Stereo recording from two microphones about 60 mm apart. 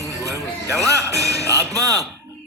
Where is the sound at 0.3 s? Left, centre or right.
Right.